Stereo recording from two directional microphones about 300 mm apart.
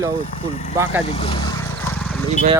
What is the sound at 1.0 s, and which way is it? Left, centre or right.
Vehicle, centre.